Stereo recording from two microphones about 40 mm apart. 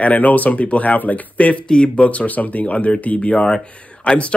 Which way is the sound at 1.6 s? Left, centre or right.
Left.